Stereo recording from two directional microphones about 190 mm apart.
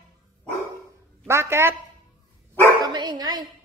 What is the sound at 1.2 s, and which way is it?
Speech, 15° right (ahead or behind).